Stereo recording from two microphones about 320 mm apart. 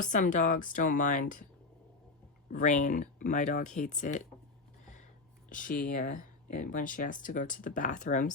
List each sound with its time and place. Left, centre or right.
0.0 s speech: left
2.5 s speech: left
5.5 s speech: left